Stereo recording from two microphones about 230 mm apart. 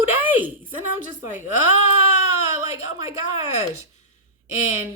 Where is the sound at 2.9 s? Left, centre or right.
Centre.